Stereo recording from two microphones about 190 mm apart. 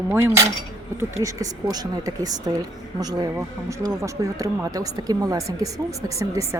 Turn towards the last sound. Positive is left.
turn(degrees=-15)  # may be behind; listen again after turning